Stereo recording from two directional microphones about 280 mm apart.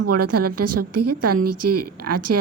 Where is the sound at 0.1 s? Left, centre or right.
Right.